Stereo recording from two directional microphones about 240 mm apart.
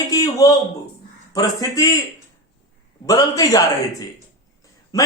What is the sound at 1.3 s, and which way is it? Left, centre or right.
Speech, centre.